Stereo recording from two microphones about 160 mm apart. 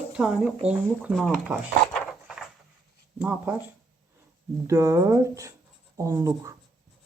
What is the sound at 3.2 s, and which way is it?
Speech, 10° right (ahead or behind).